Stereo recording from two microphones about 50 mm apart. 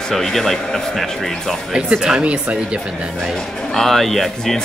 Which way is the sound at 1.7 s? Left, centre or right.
Centre.